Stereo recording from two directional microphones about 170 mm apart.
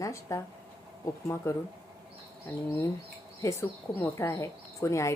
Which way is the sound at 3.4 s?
15° left (ahead or behind).